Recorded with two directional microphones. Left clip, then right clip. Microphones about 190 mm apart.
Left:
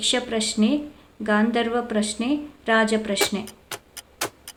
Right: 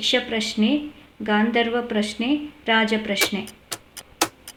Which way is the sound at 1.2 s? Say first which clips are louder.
Right 1 dB; 5° left (ahead or behind).